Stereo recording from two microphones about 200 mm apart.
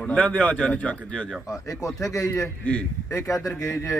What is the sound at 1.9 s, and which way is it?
Speech, centre (ahead or behind).